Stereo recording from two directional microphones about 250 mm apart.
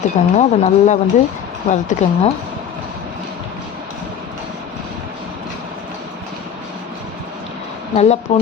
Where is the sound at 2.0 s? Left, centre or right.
Left.